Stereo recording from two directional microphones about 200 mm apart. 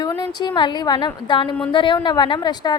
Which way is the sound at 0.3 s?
20° left (ahead or behind).